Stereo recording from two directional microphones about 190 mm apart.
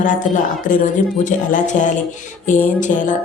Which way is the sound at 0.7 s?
45° left (ahead or behind).